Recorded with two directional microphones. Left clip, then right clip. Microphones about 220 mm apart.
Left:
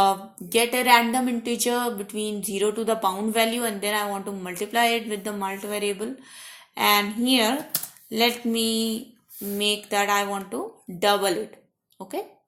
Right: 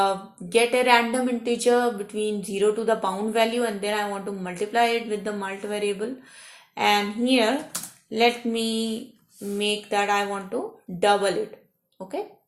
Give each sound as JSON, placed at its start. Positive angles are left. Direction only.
{"t": 0.0, "sound": "speech", "side_deg": 35}